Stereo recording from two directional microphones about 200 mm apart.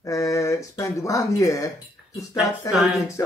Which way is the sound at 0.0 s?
15° left (ahead or behind).